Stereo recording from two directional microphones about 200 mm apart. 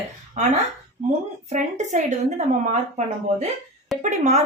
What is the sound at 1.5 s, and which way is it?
Speech, 35° right (ahead or behind).